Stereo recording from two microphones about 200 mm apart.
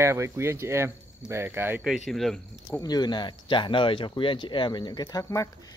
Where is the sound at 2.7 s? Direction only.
20° left (ahead or behind).